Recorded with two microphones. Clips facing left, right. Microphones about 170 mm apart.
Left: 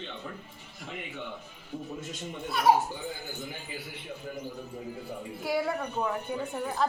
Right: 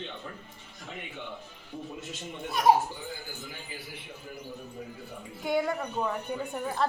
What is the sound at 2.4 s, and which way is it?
Speech, 20° right (ahead or behind).